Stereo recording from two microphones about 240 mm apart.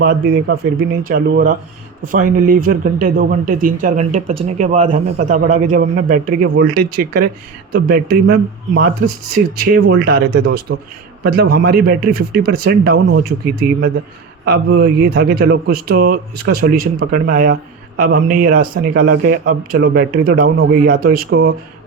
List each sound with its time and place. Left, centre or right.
0.0 s speech: right
9.9 s a man's voice: right